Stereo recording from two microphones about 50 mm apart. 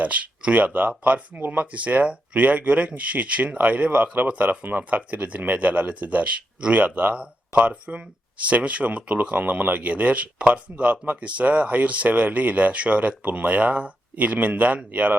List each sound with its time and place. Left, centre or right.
0.0 s speech: right